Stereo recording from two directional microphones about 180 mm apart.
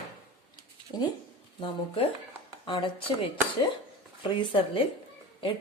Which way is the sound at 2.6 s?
25° left (ahead or behind).